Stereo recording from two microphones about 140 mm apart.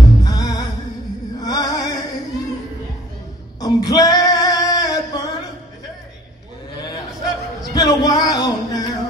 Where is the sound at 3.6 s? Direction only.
25° left (ahead or behind).